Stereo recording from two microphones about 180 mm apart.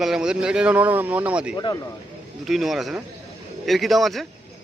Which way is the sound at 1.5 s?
20° left (ahead or behind).